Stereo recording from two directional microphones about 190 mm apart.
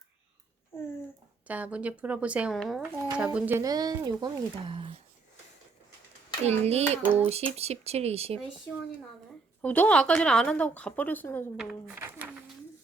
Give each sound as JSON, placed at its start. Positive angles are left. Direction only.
{"t": 0.7, "sound": "a sound", "side_deg": 15}
{"t": 1.5, "sound": "speech", "side_deg": -10}
{"t": 6.4, "sound": "speech", "side_deg": -35}
{"t": 9.6, "sound": "a woman's voice", "side_deg": 10}
{"t": 11.5, "sound": "speech", "side_deg": -5}